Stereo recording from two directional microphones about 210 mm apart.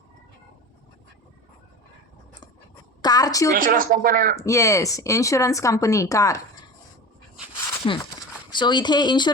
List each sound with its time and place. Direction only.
3.0 s a woman's voice: 20° left (ahead or behind)
3.5 s speech: 40° right (ahead or behind)
4.4 s speech: 15° left (ahead or behind)
7.9 s speech: 25° left (ahead or behind)